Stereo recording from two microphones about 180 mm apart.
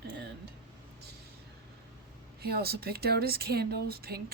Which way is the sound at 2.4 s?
60° right (ahead or behind).